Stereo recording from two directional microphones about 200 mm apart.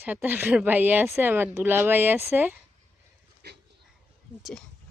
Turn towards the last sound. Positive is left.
turn(degrees=-55)  # may be behind; listen again after turning